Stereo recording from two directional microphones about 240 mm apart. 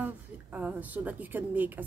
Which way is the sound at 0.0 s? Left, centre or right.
Centre.